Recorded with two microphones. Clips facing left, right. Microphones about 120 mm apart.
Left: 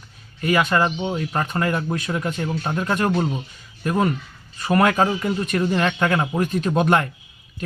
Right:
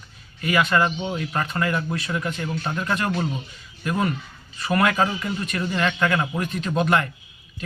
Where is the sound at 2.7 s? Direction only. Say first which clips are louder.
Left 5 dB; 30° left (ahead or behind).